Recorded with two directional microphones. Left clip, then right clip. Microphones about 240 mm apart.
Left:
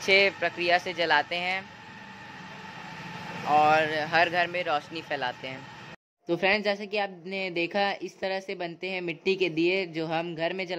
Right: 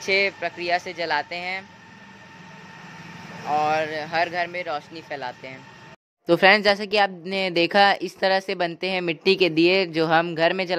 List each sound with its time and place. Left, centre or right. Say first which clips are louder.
0.0 s speech: even; centre
3.2 s speech: left 1 dB; centre
6.2 s speech: right 9 dB; right